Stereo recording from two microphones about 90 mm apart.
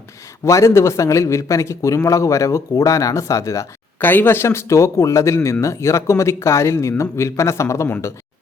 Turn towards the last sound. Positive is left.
turn(degrees=35)  # may be behind; listen again after turning